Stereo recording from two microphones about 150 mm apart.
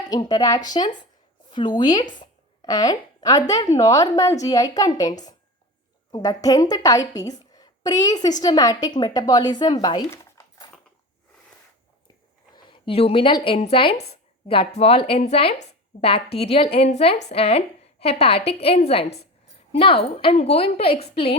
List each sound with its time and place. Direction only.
0.1 s a woman's voice: 25° left (ahead or behind)
1.5 s a sound: 30° left (ahead or behind)
1.8 s a woman's voice: 25° left (ahead or behind)
10.1 s dog: 20° left (ahead or behind)
12.5 s speech: 35° left (ahead or behind)